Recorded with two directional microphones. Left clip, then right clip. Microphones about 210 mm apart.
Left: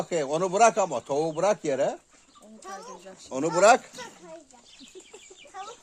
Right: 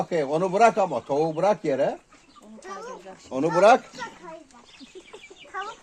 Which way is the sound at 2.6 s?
55° left (ahead or behind).